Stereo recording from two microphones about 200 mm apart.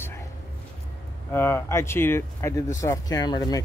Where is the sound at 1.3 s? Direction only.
10° left (ahead or behind).